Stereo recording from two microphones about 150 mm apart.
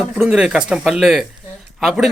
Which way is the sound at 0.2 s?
5° right (ahead or behind).